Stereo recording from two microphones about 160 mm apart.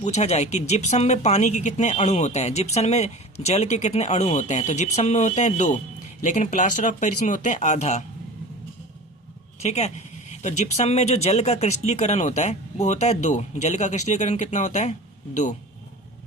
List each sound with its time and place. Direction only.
0.0 s speech: 45° left (ahead or behind)
9.6 s speech: 45° left (ahead or behind)